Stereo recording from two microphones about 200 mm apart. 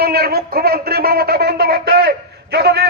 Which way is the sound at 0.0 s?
50° right (ahead or behind).